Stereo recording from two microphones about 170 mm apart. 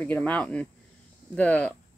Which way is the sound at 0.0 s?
10° left (ahead or behind).